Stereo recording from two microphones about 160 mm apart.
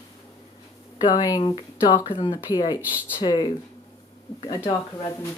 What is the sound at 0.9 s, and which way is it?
Speech, 25° left (ahead or behind).